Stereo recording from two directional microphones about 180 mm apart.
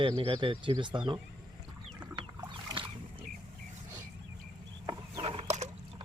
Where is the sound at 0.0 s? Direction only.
30° right (ahead or behind).